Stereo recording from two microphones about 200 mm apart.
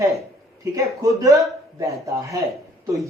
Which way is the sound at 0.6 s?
15° right (ahead or behind).